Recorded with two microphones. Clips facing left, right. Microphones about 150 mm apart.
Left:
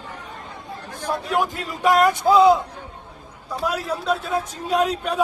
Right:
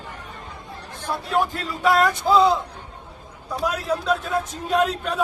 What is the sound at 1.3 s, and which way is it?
A man's voice, 15° left (ahead or behind).